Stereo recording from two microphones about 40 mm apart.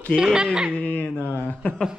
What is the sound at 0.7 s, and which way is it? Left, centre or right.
Speech, left.